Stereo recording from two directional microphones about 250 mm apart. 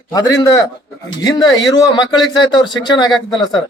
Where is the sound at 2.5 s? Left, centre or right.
Centre.